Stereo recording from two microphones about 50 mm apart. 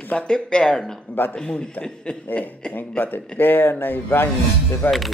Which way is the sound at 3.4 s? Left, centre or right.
Left.